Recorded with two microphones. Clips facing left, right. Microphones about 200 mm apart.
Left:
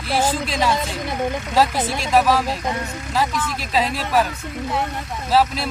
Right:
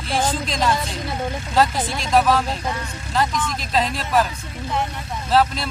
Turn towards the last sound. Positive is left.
turn(degrees=5)  # may be behind; listen again after turning